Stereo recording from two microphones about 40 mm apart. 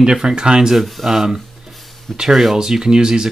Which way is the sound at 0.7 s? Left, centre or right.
Centre.